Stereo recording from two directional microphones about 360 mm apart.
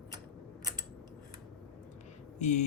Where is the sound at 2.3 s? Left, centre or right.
Centre.